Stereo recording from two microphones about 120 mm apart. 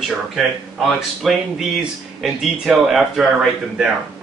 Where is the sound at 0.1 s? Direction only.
5° right (ahead or behind).